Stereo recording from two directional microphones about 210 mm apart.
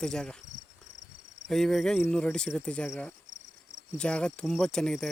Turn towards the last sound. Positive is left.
turn(degrees=5)  # may be behind; listen again after turning